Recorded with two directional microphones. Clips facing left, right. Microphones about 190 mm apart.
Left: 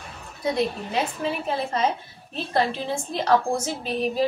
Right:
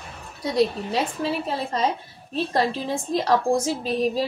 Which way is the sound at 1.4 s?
35° right (ahead or behind).